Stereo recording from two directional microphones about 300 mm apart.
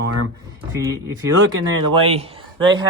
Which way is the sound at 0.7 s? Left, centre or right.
Centre.